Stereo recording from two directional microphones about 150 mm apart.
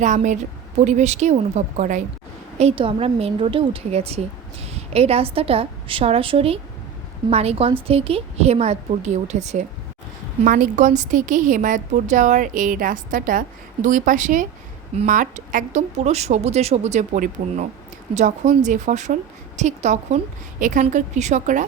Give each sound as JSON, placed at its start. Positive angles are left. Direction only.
{"t": 0.0, "sound": "speech", "side_deg": -55}
{"t": 2.6, "sound": "a woman's voice", "side_deg": -40}
{"t": 10.4, "sound": "a woman's voice", "side_deg": -65}